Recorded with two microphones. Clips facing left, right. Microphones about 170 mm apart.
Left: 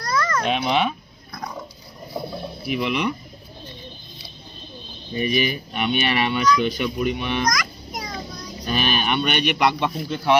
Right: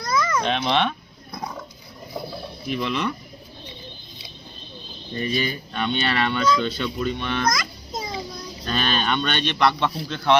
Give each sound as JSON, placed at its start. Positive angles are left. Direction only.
{"t": 0.1, "sound": "a sound", "side_deg": -10}
{"t": 0.4, "sound": "speech", "side_deg": 10}
{"t": 2.6, "sound": "speech", "side_deg": 15}
{"t": 5.1, "sound": "speech", "side_deg": 15}
{"t": 7.5, "sound": "music", "side_deg": -25}
{"t": 8.6, "sound": "speech", "side_deg": 15}